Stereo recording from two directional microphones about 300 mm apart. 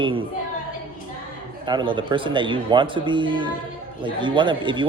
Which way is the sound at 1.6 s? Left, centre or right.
Centre.